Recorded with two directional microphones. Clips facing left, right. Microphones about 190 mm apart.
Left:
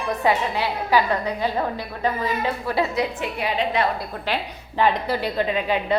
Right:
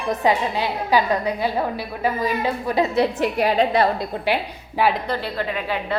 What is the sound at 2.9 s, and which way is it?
Speech, 35° right (ahead or behind).